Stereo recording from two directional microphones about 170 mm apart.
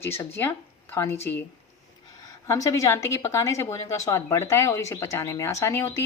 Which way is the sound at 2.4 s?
20° left (ahead or behind).